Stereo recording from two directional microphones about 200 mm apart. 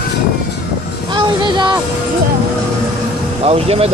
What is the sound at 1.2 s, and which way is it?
Speech, 25° right (ahead or behind).